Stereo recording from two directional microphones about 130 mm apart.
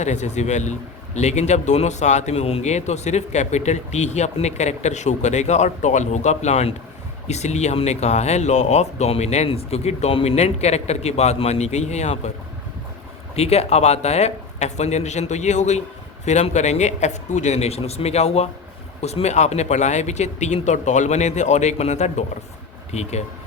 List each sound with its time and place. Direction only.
0.0 s a man's voice: 60° left (ahead or behind)
13.3 s a man's voice: 55° left (ahead or behind)